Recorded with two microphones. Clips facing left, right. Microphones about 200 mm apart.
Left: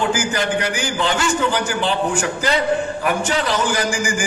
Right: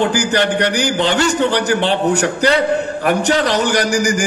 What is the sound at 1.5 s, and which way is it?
A man's voice, 70° right (ahead or behind).